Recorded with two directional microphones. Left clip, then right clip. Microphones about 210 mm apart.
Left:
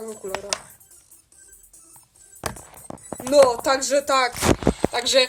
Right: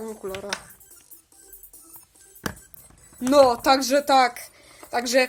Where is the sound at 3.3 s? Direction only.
25° right (ahead or behind).